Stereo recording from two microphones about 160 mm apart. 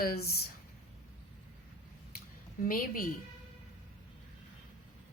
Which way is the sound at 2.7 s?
65° left (ahead or behind).